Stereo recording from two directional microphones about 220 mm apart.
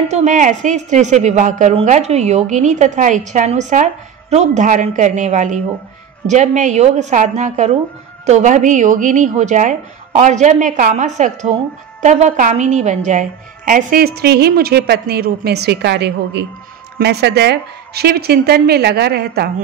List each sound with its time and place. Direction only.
0.1 s a woman's voice: 35° right (ahead or behind)